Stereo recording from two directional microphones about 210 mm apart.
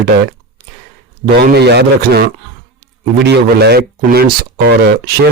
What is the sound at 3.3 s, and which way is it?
A man's voice, 50° right (ahead or behind).